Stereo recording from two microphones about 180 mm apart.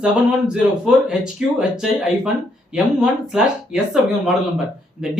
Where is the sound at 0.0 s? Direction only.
5° right (ahead or behind).